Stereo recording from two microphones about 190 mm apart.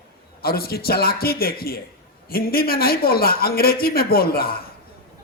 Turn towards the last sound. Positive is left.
turn(degrees=50)  # may be behind; listen again after turning